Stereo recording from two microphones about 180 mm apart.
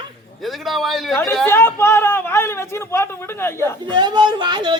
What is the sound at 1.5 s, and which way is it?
A woman's voice, 10° left (ahead or behind).